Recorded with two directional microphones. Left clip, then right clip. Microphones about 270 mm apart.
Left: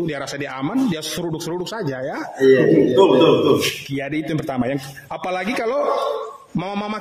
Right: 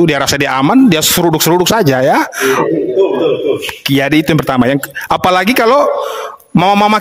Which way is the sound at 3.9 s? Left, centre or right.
Right.